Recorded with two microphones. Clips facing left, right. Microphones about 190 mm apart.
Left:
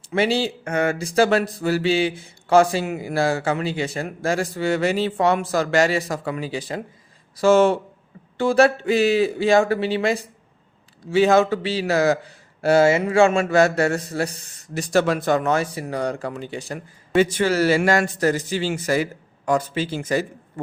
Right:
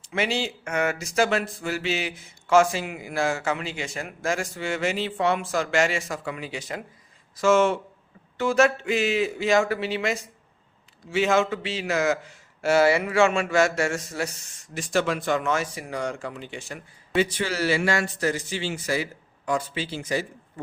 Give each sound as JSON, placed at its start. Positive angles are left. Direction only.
{"t": 0.1, "sound": "a man's voice", "side_deg": 35}